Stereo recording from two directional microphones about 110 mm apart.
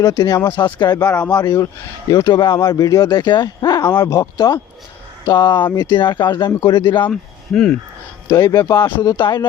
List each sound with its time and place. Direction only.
0.0 s speech: 35° left (ahead or behind)
7.1 s speech: 5° left (ahead or behind)
8.3 s speech: 30° left (ahead or behind)